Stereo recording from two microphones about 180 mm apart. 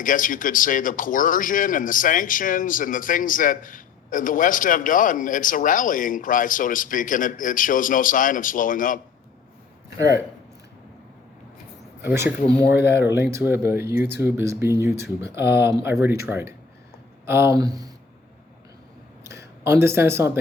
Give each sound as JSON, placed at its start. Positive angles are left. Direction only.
{"t": 0.0, "sound": "a man's voice", "side_deg": 50}
{"t": 12.0, "sound": "speech", "side_deg": -15}
{"t": 19.2, "sound": "speech", "side_deg": -15}